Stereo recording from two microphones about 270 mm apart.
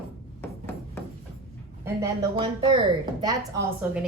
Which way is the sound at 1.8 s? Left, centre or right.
Centre.